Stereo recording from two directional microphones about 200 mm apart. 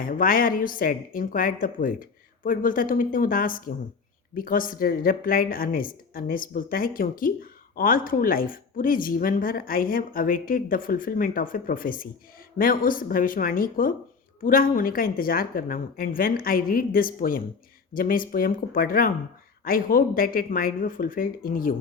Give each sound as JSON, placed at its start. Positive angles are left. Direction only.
{"t": 0.0, "sound": "a woman's voice", "side_deg": 45}